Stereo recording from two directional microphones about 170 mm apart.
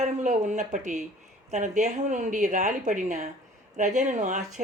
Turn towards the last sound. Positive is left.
turn(degrees=-45)  # may be behind; listen again after turning